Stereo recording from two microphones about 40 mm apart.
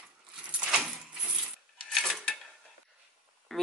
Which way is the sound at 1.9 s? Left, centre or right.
Centre.